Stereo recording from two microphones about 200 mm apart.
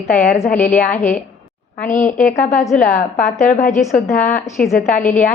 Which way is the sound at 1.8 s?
40° left (ahead or behind).